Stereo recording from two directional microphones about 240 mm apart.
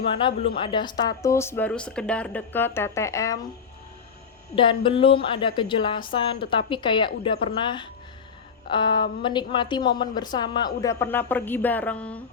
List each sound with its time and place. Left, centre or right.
0.1 s speech: left
4.5 s speech: left